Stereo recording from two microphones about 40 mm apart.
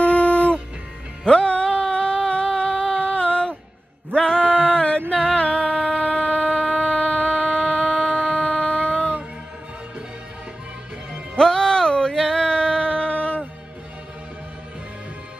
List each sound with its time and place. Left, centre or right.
0.0 s music: left
5.1 s shofar: left
11.3 s a sound: centre